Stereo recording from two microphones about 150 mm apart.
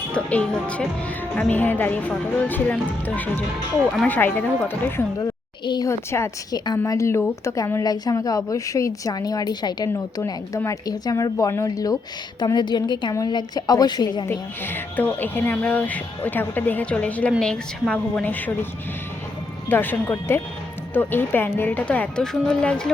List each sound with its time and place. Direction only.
0.1 s speech: 10° left (ahead or behind)
5.6 s speech: 30° left (ahead or behind)
5.9 s speech: 15° left (ahead or behind)
14.3 s speech: 15° left (ahead or behind)
19.6 s speech: 15° left (ahead or behind)